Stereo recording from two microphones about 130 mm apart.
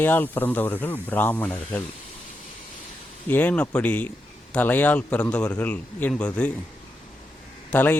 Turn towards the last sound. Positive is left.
turn(degrees=15)  # may be behind; listen again after turning